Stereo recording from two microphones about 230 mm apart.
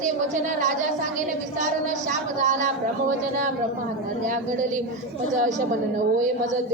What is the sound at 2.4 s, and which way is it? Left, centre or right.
Speech, right.